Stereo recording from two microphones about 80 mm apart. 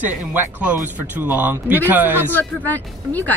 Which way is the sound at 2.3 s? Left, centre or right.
Left.